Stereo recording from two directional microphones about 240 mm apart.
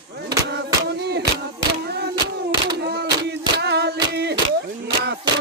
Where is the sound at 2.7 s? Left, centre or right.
Right.